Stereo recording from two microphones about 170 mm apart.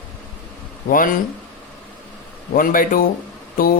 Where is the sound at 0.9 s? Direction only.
55° left (ahead or behind).